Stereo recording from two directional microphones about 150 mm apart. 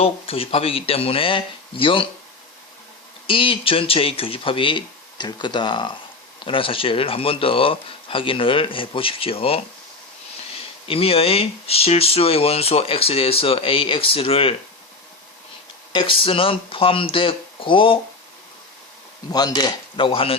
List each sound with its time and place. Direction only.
0.0 s speech: 40° left (ahead or behind)
3.2 s speech: 35° left (ahead or behind)
10.8 s speech: 40° left (ahead or behind)
15.9 s speech: 35° left (ahead or behind)
19.3 s speech: 25° left (ahead or behind)